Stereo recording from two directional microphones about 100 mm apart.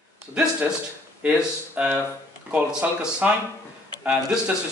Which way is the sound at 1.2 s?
15° right (ahead or behind).